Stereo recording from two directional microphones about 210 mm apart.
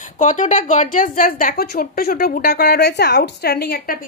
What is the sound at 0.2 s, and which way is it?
A woman's voice, 35° left (ahead or behind).